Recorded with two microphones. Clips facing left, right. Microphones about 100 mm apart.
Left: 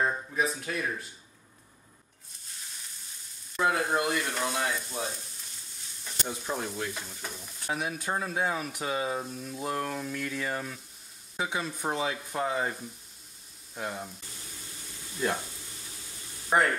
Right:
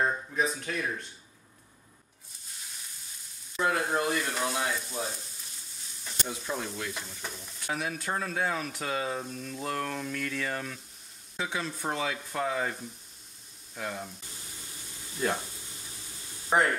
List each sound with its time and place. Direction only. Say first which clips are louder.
0.0 s speech: even; 5° left (ahead or behind)
3.7 s frying: even; centre (ahead or behind)
6.2 s speech: left 1 dB; 20° left (ahead or behind)
7.0 s frying: even; 5° left (ahead or behind)
7.7 s speech: left 1 dB; 15° left (ahead or behind)
13.7 s speech: left 1 dB; 15° left (ahead or behind)
15.1 s frying: even; 5° right (ahead or behind)
16.4 s speech: even; centre (ahead or behind)